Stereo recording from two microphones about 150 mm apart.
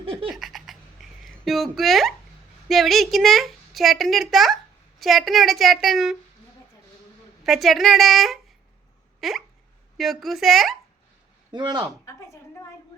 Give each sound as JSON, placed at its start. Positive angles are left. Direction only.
{"t": 0.0, "sound": "laughter", "side_deg": -35}
{"t": 0.3, "sound": "laughter", "side_deg": 0}
{"t": 1.5, "sound": "a woman's voice", "side_deg": 0}
{"t": 7.4, "sound": "a woman's voice", "side_deg": 0}
{"t": 9.2, "sound": "hiccup", "side_deg": 0}
{"t": 10.0, "sound": "a woman's voice", "side_deg": 0}
{"t": 11.5, "sound": "speech", "side_deg": -30}
{"t": 12.0, "sound": "a sound", "side_deg": 20}